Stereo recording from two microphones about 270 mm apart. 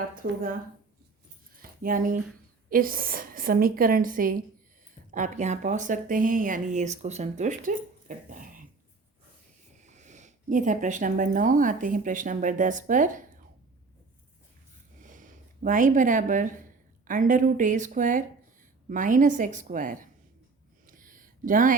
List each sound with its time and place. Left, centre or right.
0.1 s a woman's voice: right
1.5 s a sound: right
2.6 s a woman's voice: right
9.8 s speech: right
15.0 s speech: right
20.8 s a sound: right